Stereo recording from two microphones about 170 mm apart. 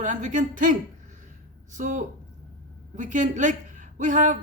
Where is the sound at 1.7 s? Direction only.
50° right (ahead or behind).